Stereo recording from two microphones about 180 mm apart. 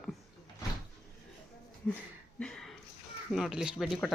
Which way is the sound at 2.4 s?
5° left (ahead or behind).